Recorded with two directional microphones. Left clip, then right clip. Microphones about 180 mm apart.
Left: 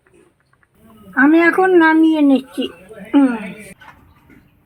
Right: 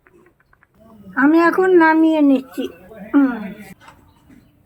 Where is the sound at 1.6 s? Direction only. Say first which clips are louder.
Left 1 dB; 30° left (ahead or behind).